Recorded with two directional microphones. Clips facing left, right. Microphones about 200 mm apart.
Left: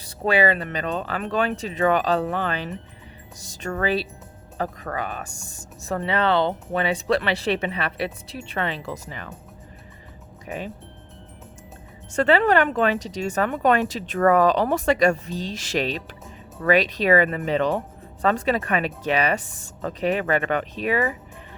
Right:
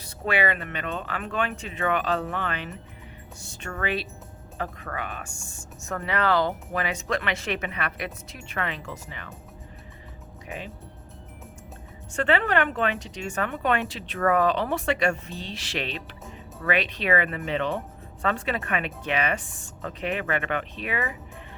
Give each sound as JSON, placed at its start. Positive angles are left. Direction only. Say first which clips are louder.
{"t": 0.0, "sound": "speech", "louder": "left 5 dB", "side_deg": 35}
{"t": 3.4, "sound": "music", "louder": "left 7 dB", "side_deg": 40}
{"t": 3.7, "sound": "speech", "louder": "left 6 dB", "side_deg": 35}
{"t": 12.1, "sound": "speech", "louder": "left 5 dB", "side_deg": 40}